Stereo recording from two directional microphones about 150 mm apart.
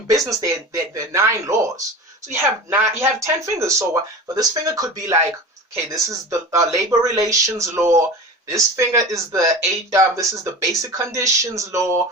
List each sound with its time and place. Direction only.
0.1 s speech: 20° right (ahead or behind)